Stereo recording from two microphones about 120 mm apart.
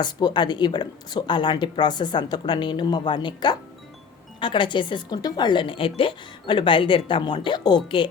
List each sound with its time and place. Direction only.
0.0 s speech: 40° left (ahead or behind)